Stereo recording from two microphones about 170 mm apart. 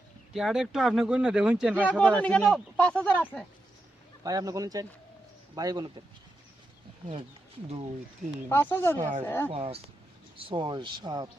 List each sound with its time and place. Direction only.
0.3 s speech: centre (ahead or behind)
1.8 s speech: 5° left (ahead or behind)
4.2 s speech: 20° right (ahead or behind)
8.4 s speech: 15° left (ahead or behind)
9.5 s speech: 35° right (ahead or behind)